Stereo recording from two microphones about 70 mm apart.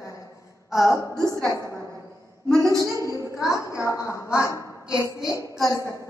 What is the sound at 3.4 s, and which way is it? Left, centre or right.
A woman's voice, left.